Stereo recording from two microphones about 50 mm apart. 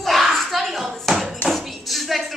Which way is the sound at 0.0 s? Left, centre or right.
Centre.